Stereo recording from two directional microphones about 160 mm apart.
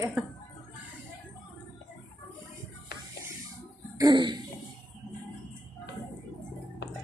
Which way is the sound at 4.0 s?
25° right (ahead or behind).